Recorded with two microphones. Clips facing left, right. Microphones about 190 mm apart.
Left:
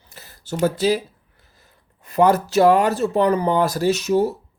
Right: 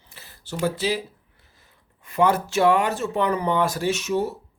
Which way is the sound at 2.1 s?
40° left (ahead or behind).